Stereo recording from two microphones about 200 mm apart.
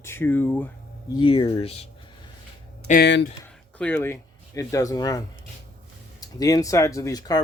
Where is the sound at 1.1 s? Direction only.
25° left (ahead or behind).